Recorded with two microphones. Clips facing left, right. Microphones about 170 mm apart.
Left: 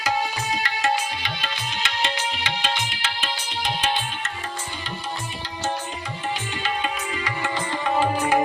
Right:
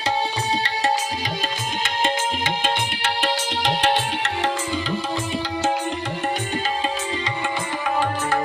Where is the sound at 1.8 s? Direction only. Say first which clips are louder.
Right 4 dB; 50° right (ahead or behind); by 4.5 s 75° right (ahead or behind).